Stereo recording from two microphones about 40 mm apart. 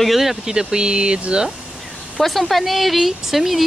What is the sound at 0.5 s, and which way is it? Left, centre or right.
Speech, centre.